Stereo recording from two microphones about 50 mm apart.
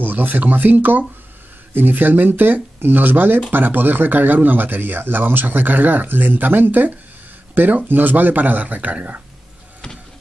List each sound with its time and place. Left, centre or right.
0.0 s speech: right